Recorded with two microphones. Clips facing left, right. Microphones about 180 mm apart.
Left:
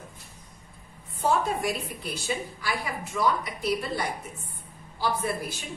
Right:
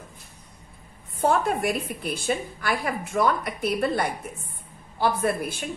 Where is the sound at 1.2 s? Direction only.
60° right (ahead or behind).